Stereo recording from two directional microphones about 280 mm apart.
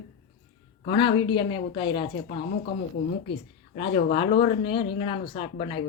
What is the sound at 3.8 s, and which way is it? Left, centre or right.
Speech, left.